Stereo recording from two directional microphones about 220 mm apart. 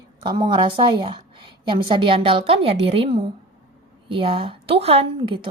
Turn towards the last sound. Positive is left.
turn(degrees=-25)  # may be behind; listen again after turning